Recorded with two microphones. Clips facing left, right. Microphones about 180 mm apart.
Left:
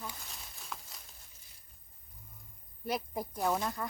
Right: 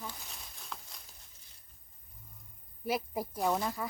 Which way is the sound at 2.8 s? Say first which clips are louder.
Right 2 dB; 5° right (ahead or behind).